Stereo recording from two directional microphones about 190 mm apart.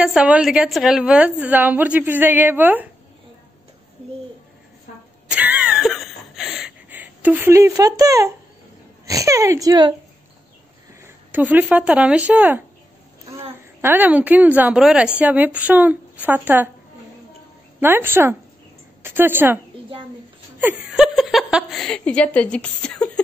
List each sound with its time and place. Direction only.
0.0 s a woman's voice: 5° right (ahead or behind)
5.3 s a sound: 5° right (ahead or behind)
9.0 s a woman's voice: 15° right (ahead or behind)
11.0 s speech: 10° right (ahead or behind)
13.7 s a woman's voice: 10° right (ahead or behind)
17.7 s a woman's voice: 10° right (ahead or behind); by 23.2 s 5° left (ahead or behind)